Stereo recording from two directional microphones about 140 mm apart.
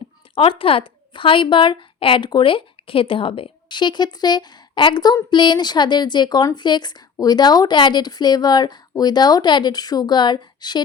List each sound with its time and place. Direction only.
0.3 s speech: 40° left (ahead or behind)